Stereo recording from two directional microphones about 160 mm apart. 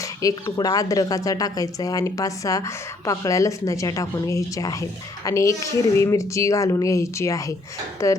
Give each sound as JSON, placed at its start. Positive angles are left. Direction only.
{"t": 0.2, "sound": "a woman's voice", "side_deg": 20}